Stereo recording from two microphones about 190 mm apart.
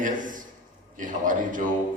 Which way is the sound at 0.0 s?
45° right (ahead or behind).